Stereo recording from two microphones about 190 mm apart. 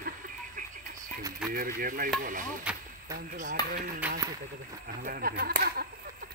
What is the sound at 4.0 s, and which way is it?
Speech, 15° right (ahead or behind).